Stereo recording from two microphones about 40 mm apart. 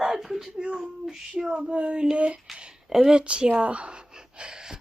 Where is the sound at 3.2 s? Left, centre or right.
Right.